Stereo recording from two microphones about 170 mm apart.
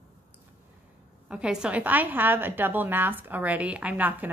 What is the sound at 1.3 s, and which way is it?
A woman's voice, 5° right (ahead or behind).